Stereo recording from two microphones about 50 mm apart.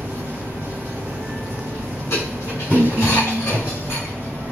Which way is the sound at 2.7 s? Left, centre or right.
Left.